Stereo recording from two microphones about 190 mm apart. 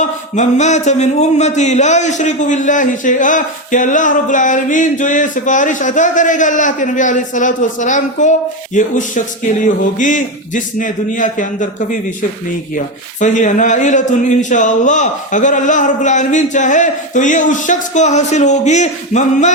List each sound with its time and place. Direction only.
0.0 s a man's voice: 40° left (ahead or behind)